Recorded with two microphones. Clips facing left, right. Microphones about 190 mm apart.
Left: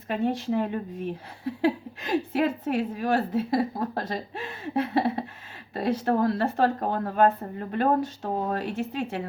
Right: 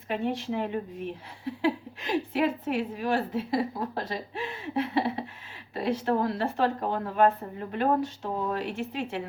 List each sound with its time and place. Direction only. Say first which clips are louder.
0.1 s a woman's voice: left 3 dB; 40° left (ahead or behind)